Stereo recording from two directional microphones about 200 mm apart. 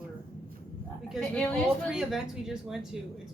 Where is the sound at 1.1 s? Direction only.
5° left (ahead or behind).